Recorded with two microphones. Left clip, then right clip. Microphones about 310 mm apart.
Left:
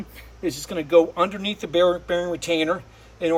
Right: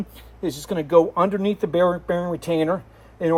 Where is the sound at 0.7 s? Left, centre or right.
Centre.